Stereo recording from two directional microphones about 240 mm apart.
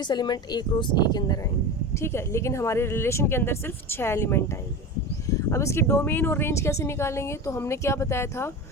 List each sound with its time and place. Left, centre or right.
0.1 s speech: centre